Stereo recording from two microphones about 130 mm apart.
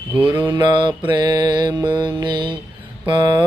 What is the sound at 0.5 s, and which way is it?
Mantra, 35° right (ahead or behind).